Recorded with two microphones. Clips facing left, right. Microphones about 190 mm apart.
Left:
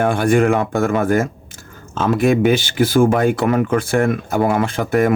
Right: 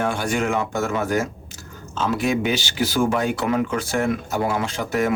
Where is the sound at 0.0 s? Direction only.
55° left (ahead or behind).